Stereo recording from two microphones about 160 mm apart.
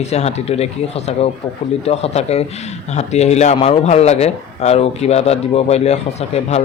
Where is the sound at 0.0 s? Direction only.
45° left (ahead or behind).